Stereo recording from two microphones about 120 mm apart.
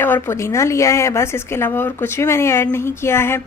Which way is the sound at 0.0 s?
20° left (ahead or behind).